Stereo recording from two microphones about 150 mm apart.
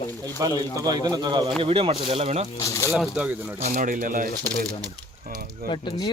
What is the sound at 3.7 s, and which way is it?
Speech, 70° right (ahead or behind).